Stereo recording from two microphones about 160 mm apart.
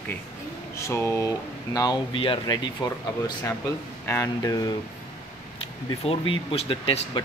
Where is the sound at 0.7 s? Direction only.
15° left (ahead or behind).